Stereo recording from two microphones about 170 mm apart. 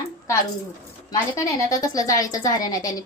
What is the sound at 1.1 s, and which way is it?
A woman's voice, 20° left (ahead or behind).